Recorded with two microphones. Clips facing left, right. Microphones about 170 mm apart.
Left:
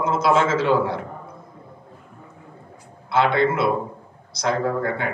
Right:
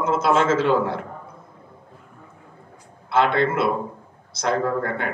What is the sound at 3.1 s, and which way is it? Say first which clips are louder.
A man's voice: left 1 dB; 50° right (ahead or behind).